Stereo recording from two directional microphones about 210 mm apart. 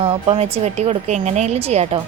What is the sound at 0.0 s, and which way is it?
A woman's voice, 25° right (ahead or behind).